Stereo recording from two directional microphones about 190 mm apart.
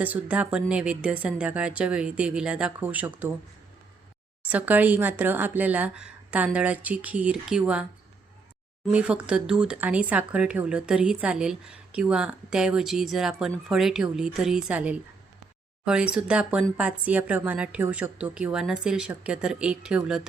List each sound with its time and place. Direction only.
0.0 s speech: 10° right (ahead or behind)
4.4 s speech: 10° right (ahead or behind)
8.9 s speech: 5° right (ahead or behind)